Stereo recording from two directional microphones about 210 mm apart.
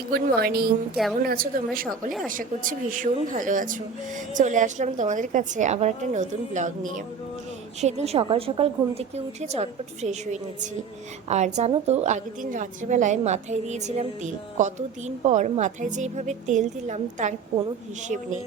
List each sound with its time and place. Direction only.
0.1 s a woman's voice: 50° right (ahead or behind)